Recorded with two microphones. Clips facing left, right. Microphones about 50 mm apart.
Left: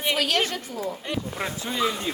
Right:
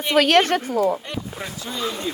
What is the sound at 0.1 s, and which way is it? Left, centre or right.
Speech, right.